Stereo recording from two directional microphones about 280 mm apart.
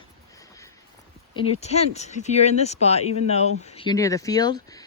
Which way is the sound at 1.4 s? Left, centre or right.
Left.